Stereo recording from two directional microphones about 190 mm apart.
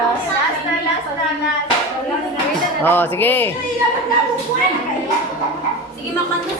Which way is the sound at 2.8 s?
10° left (ahead or behind).